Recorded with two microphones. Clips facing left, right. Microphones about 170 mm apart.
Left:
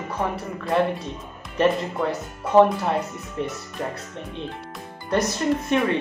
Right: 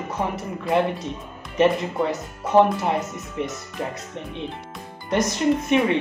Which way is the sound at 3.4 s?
15° right (ahead or behind).